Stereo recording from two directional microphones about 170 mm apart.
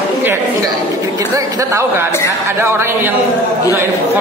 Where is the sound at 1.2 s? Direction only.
20° right (ahead or behind).